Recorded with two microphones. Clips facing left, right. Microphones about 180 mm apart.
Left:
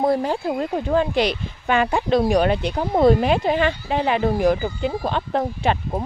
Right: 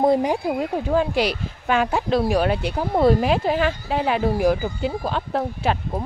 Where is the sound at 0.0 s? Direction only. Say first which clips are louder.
Right 2 dB; 20° right (ahead or behind).